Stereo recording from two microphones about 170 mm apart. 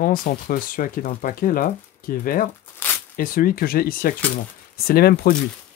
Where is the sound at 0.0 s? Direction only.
55° left (ahead or behind).